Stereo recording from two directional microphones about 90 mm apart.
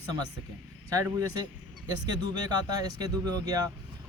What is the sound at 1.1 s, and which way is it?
Speech, 45° right (ahead or behind).